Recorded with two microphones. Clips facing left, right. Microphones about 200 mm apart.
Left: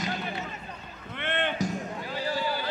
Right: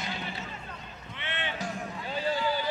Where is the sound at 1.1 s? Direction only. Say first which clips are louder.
Left 7 dB; 55° left (ahead or behind).